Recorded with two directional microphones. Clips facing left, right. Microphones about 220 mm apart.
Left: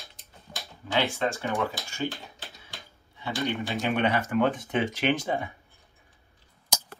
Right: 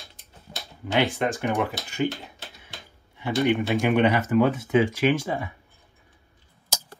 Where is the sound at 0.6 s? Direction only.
25° right (ahead or behind).